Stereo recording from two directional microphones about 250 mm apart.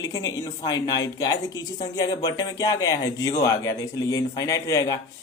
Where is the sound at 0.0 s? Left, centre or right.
Centre.